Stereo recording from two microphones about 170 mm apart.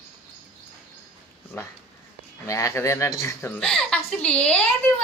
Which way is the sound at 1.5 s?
10° left (ahead or behind).